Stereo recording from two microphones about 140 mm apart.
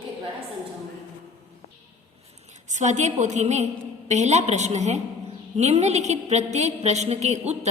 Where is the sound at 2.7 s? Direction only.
60° right (ahead or behind).